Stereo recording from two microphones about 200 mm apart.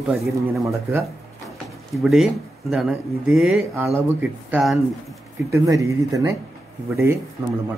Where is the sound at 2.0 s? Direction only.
Centre (ahead or behind).